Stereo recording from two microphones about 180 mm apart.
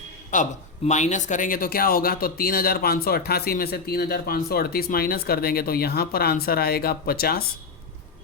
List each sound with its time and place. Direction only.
0.3 s a man's voice: 45° left (ahead or behind)